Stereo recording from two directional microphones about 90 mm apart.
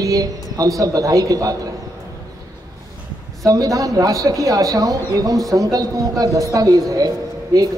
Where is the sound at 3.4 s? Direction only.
40° right (ahead or behind).